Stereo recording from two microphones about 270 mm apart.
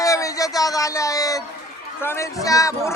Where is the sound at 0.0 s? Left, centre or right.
Centre.